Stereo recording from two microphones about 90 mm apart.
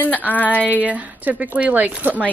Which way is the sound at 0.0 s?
20° left (ahead or behind).